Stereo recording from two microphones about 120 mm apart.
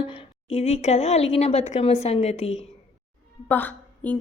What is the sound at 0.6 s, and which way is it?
A woman's voice, 70° left (ahead or behind).